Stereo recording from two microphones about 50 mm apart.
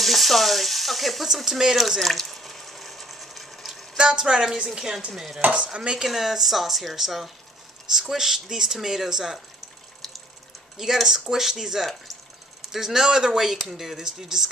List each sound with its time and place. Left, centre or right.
0.0 s speech: centre
2.0 s water: centre
3.9 s a woman's voice: centre
5.4 s cutlery: right
5.7 s speech: centre
10.8 s speech: centre